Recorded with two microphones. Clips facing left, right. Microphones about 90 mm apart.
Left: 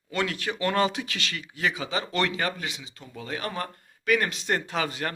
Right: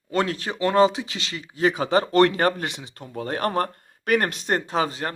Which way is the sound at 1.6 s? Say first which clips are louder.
Right 8 dB; 45° right (ahead or behind).